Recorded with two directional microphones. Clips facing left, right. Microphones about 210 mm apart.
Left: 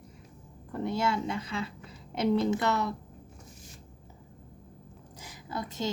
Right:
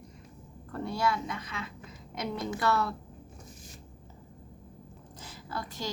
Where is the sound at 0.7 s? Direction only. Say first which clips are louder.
Left 1 dB; 20° left (ahead or behind).